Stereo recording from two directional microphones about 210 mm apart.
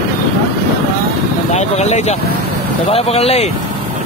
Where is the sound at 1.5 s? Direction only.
30° left (ahead or behind).